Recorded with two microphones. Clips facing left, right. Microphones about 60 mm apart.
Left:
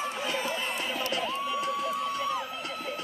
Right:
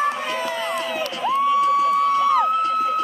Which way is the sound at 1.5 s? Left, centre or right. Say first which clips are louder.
Right 15 dB; right.